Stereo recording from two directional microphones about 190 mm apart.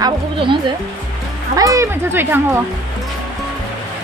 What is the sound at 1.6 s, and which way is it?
Speech, 15° right (ahead or behind).